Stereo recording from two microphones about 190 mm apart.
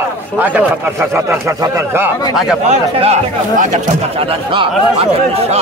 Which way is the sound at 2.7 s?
35° right (ahead or behind).